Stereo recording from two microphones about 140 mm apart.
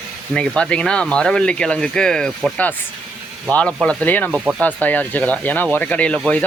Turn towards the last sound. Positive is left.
turn(degrees=10)  # may be behind; listen again after turning